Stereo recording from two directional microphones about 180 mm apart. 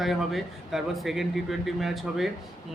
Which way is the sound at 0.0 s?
Centre (ahead or behind).